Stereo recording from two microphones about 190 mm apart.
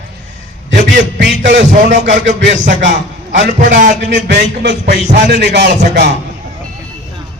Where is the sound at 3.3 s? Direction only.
40° right (ahead or behind).